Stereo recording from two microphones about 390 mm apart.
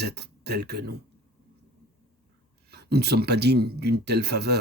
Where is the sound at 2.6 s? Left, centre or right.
Right.